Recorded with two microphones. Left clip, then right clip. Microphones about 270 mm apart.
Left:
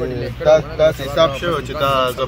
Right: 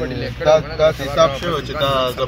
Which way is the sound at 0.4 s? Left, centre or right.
Centre.